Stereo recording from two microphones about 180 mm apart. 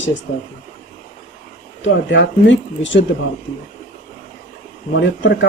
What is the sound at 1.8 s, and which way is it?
Speech, 90° left.